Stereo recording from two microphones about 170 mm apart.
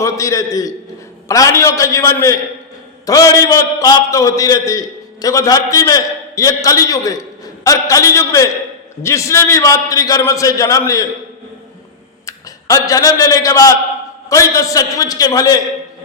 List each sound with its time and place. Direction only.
0.0 s a man's voice: 20° left (ahead or behind)
12.2 s a man's voice: 20° left (ahead or behind)